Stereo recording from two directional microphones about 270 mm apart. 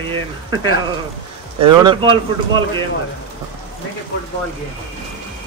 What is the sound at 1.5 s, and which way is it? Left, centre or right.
Speech, centre.